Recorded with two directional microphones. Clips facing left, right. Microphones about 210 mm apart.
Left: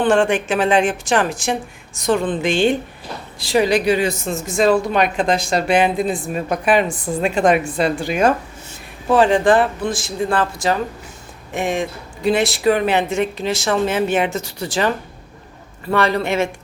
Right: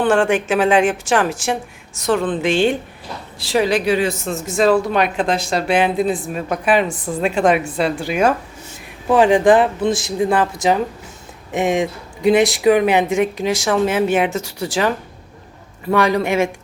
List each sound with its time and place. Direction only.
0.0 s speech: 10° right (ahead or behind)